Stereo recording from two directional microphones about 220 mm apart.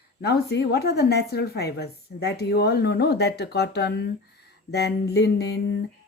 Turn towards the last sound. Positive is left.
turn(degrees=50)  # may be behind; listen again after turning